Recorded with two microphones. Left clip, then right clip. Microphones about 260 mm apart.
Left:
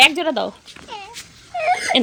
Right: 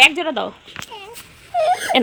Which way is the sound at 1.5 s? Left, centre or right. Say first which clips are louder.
Right 1 dB; right.